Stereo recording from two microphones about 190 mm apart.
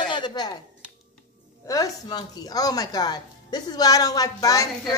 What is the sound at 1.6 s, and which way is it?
Speech, 20° left (ahead or behind).